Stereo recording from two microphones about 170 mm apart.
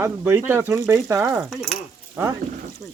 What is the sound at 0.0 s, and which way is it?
Speech, 15° right (ahead or behind).